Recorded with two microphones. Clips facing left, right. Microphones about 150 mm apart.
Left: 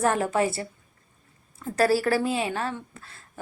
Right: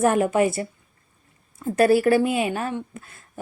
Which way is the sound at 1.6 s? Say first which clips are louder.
Right 5 dB; 25° right (ahead or behind).